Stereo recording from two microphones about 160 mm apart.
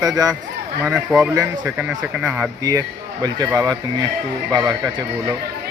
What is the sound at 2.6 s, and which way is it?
Speech, 25° right (ahead or behind).